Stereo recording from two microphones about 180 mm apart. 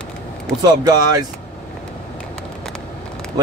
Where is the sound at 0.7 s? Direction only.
20° right (ahead or behind).